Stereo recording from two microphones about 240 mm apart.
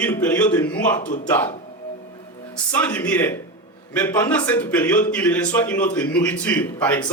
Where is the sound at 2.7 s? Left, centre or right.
Centre.